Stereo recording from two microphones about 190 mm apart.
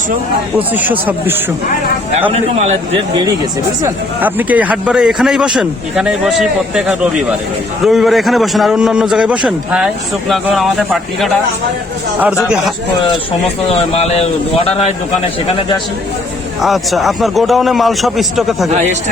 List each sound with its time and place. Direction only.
0.7 s speech: 10° right (ahead or behind)
2.3 s a man's voice: 35° right (ahead or behind)
3.8 s a man's voice: 10° right (ahead or behind)
13.7 s speech: 35° left (ahead or behind)
16.6 s a man's voice: centre (ahead or behind)
18.7 s a man's voice: 40° right (ahead or behind)